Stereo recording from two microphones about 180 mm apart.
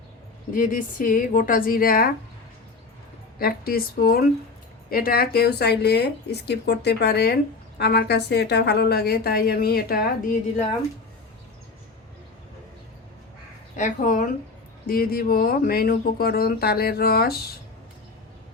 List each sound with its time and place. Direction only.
0.5 s a woman's voice: 50° left (ahead or behind)
3.3 s a woman's voice: 55° left (ahead or behind)
13.7 s a woman's voice: 45° left (ahead or behind)